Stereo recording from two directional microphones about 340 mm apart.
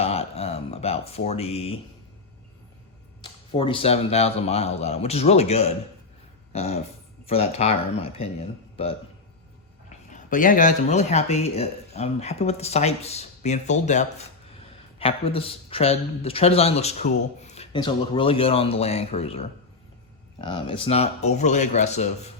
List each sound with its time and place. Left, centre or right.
0.0 s speech: centre
3.5 s speech: centre
10.1 s speech: left